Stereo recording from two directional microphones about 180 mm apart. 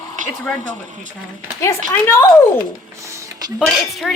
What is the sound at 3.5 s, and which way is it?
Speech, centre (ahead or behind).